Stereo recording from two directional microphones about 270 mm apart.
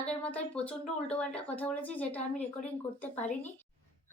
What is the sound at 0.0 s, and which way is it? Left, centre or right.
A woman's voice, centre.